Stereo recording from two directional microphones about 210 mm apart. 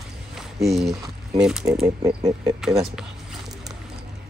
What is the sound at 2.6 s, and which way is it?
Speech, centre (ahead or behind).